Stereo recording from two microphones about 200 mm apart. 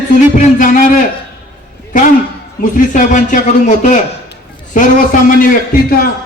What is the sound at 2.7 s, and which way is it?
A man's voice, 40° left (ahead or behind).